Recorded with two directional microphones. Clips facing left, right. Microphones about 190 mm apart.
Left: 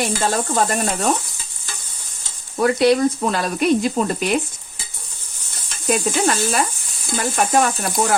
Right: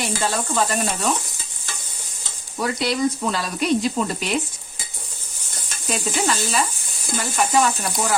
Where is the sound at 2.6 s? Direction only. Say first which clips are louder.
Left 7 dB; 55° left (ahead or behind).